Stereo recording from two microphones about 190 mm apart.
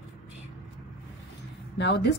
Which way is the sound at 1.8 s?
65° left (ahead or behind).